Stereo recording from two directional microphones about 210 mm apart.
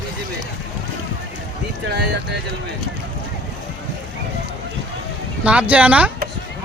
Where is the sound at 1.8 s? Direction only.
55° right (ahead or behind).